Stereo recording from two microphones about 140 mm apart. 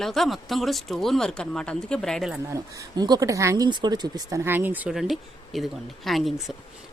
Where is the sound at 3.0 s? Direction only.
25° right (ahead or behind).